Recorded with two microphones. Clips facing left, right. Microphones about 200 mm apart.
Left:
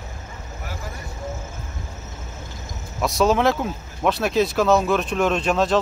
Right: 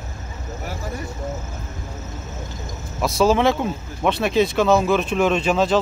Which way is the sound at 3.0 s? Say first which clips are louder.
Right 1 dB; centre (ahead or behind).